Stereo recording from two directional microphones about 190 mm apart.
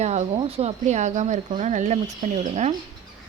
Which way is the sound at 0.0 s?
35° right (ahead or behind).